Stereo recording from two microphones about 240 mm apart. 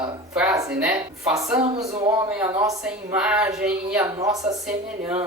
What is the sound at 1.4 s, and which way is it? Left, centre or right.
A woman's voice, centre.